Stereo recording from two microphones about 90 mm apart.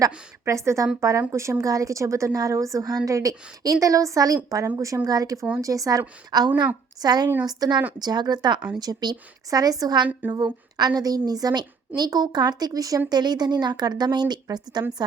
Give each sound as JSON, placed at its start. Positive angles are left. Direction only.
{"t": 0.4, "sound": "a woman's voice", "side_deg": -35}